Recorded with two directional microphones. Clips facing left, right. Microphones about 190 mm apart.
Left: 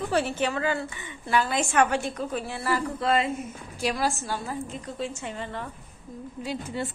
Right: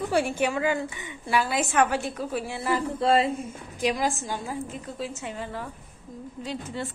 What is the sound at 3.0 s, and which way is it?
Speech, 30° right (ahead or behind).